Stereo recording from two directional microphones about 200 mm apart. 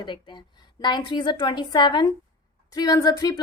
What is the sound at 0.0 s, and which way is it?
A woman's voice, 20° left (ahead or behind).